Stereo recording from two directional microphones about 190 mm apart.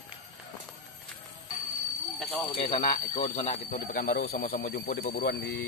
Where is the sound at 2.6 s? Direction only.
35° left (ahead or behind); by 5.5 s 55° left (ahead or behind).